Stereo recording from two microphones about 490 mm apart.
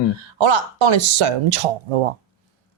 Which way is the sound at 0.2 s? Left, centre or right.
Right.